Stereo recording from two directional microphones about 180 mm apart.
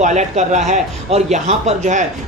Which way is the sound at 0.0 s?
40° right (ahead or behind).